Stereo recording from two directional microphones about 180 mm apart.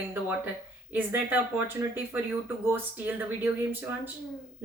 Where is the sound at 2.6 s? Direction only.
10° right (ahead or behind).